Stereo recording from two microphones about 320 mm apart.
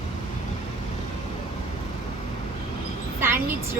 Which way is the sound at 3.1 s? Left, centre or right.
Centre.